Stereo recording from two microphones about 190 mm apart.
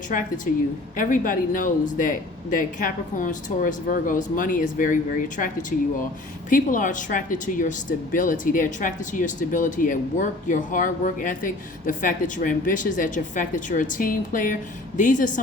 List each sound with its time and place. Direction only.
0.1 s speech: 45° left (ahead or behind)
6.5 s speech: 45° left (ahead or behind)